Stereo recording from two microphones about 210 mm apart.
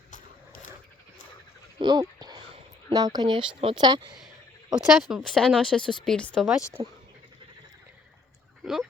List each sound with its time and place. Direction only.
1.8 s a sound: 20° right (ahead or behind)
2.9 s speech: 15° right (ahead or behind)
4.7 s speech: centre (ahead or behind)
6.8 s speech: 20° right (ahead or behind)
8.6 s speech: centre (ahead or behind)